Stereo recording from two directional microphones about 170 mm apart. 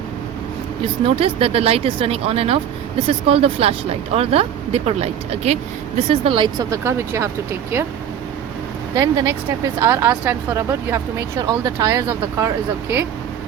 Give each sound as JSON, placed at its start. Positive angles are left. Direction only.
{"t": 1.0, "sound": "speech", "side_deg": -35}
{"t": 9.0, "sound": "speech", "side_deg": -20}